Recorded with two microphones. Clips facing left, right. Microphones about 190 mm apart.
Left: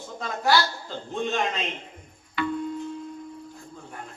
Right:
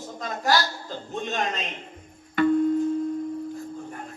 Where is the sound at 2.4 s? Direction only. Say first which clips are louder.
Right 8 dB; 45° right (ahead or behind).